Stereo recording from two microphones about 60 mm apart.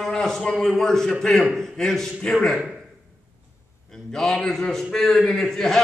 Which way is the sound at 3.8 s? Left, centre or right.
Centre.